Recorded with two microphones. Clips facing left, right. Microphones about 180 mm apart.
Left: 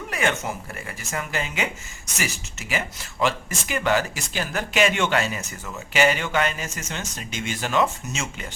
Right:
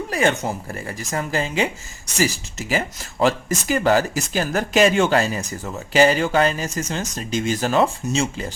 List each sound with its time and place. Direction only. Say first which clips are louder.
0.1 s speech: right 4 dB; 35° right (ahead or behind)